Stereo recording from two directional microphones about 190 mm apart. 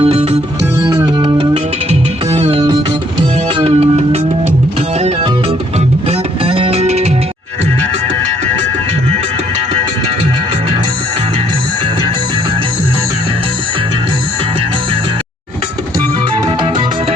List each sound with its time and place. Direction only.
0.0 s music: 35° right (ahead or behind)
0.8 s music: 20° right (ahead or behind)